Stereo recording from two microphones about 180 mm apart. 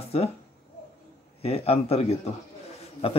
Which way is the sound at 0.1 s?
35° left (ahead or behind).